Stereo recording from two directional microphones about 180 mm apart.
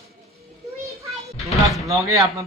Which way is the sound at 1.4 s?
Centre (ahead or behind).